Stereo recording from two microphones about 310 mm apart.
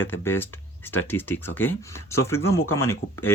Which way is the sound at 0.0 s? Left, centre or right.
Centre.